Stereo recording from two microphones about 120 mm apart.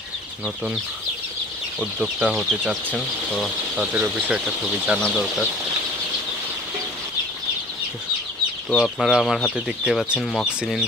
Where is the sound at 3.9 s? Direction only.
10° right (ahead or behind).